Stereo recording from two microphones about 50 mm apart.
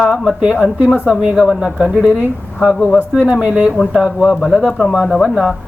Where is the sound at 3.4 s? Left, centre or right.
Right.